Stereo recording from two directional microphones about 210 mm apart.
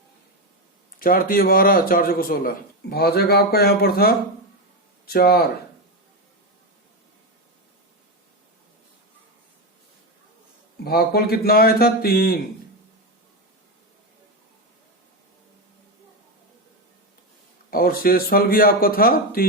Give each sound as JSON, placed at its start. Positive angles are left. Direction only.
{"t": 0.9, "sound": "speech", "side_deg": 45}
{"t": 10.8, "sound": "speech", "side_deg": 50}
{"t": 17.7, "sound": "speech", "side_deg": 45}